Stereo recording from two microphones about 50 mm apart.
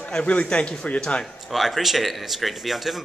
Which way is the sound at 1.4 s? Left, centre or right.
Centre.